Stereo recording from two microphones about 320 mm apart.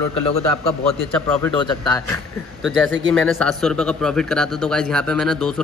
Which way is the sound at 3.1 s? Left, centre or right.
Centre.